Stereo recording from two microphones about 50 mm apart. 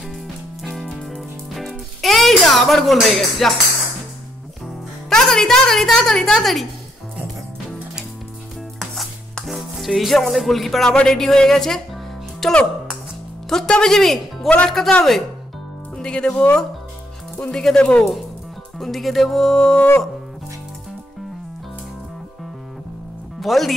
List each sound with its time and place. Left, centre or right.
0.1 s music: centre
5.1 s a woman's voice: centre
9.5 s music: centre
10.9 s speech: left
11.1 s a woman's voice: centre
16.0 s speech: centre
17.5 s a woman's voice: centre
18.8 s music: centre
23.4 s music: centre